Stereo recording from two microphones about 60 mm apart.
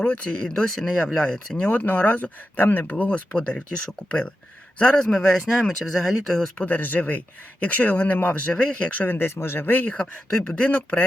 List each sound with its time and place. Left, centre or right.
0.0 s speech: left
0.4 s speech: centre
1.6 s speech: left
4.8 s speech: centre
5.1 s speech: centre
6.6 s speech: left
9.0 s speech: left
9.9 s speech: centre